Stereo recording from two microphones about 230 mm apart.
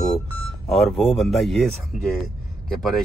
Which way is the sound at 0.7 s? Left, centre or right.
Centre.